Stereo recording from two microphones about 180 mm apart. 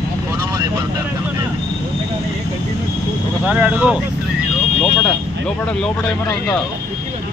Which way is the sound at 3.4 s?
5° right (ahead or behind).